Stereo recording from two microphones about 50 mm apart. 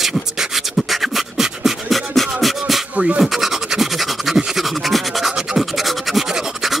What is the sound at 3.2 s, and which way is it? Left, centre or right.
Scratch, centre.